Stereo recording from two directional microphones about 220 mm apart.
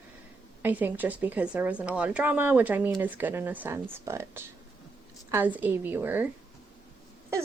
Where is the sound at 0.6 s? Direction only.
10° right (ahead or behind).